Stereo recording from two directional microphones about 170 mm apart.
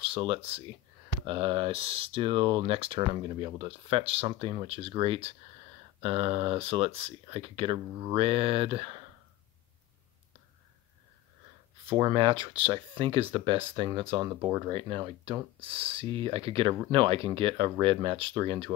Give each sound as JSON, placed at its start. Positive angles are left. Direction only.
{"t": 0.0, "sound": "speech", "side_deg": -30}
{"t": 11.9, "sound": "speech", "side_deg": -30}